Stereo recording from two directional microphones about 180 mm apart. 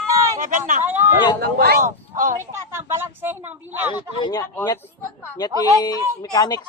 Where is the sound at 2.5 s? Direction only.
15° right (ahead or behind).